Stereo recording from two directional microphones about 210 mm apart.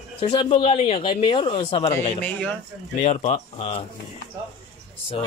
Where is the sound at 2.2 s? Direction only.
10° left (ahead or behind).